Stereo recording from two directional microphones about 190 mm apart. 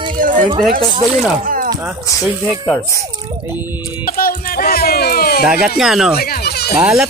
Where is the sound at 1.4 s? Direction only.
45° right (ahead or behind).